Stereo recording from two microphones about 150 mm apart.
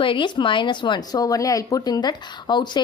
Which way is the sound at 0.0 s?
35° left (ahead or behind).